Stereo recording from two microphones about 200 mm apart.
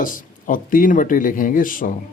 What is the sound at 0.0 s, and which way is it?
Speech, 40° left (ahead or behind).